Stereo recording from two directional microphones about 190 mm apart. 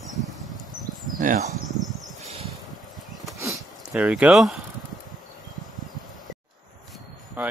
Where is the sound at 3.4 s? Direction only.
10° right (ahead or behind).